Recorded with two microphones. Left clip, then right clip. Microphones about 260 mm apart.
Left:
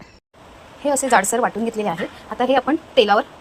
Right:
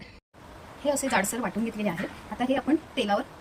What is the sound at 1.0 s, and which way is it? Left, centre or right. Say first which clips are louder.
Speech: left 10 dB; left.